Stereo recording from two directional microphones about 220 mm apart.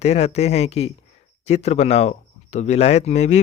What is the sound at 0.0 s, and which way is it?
Speech, 30° left (ahead or behind).